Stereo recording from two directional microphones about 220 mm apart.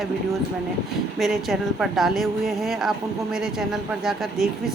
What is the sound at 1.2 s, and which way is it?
Speech, centre (ahead or behind).